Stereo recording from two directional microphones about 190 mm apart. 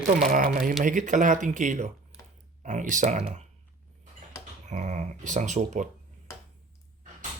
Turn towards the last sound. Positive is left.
turn(degrees=-40)  # may be behind; listen again after turning